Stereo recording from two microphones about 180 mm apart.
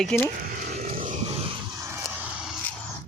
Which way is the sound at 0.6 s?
50° right (ahead or behind).